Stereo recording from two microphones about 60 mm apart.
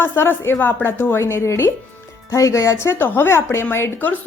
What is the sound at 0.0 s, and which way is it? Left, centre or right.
A woman's voice, left.